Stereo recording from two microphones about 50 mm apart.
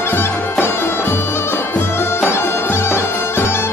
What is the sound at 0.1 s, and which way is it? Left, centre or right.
Bagpipes, left.